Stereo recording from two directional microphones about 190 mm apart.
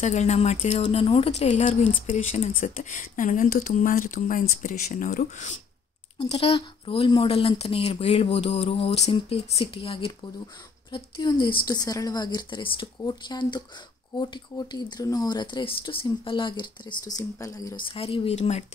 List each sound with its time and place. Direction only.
0.0 s speech: 35° left (ahead or behind)
6.2 s speech: 30° left (ahead or behind)
17.8 s speech: 30° left (ahead or behind)